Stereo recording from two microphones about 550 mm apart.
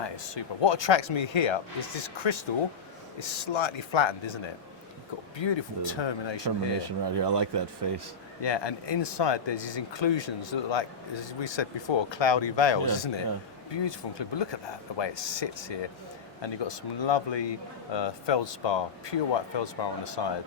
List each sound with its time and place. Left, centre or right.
0.0 s speech: left
5.4 s speech: left
6.8 s speech: right
8.4 s speech: left